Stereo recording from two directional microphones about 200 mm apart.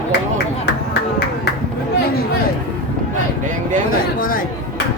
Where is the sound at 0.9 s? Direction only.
55° left (ahead or behind).